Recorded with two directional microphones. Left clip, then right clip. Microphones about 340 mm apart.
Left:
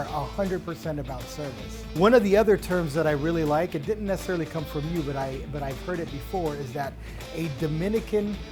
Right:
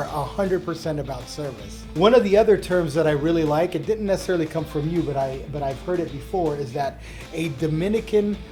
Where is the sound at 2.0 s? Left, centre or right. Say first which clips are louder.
Right 3 dB; left.